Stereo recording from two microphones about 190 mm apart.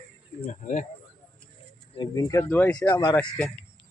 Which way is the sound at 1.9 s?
20° left (ahead or behind).